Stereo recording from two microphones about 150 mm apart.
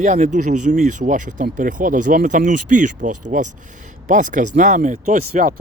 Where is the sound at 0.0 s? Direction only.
55° right (ahead or behind).